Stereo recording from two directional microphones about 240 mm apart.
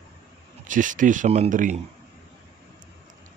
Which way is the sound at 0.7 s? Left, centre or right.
Right.